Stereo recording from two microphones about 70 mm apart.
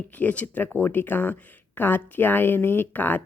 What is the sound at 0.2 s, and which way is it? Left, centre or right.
Speech, left.